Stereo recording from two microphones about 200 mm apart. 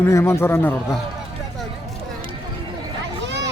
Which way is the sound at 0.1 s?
15° left (ahead or behind).